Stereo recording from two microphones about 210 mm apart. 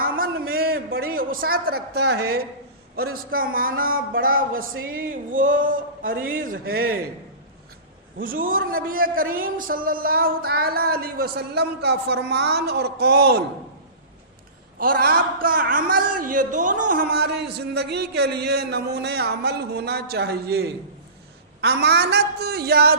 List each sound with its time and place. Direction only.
0.0 s a sound: 45° right (ahead or behind)
3.2 s a man's voice: 40° right (ahead or behind)
8.2 s a man's voice: 40° right (ahead or behind)
14.8 s a man's voice: 45° right (ahead or behind)